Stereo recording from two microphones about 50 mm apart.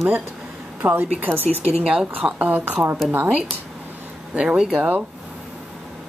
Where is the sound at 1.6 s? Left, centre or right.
Right.